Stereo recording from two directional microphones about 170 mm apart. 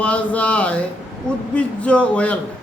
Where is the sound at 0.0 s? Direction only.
5° left (ahead or behind).